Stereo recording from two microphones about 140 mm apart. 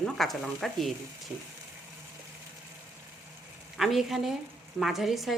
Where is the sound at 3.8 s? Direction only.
Centre (ahead or behind).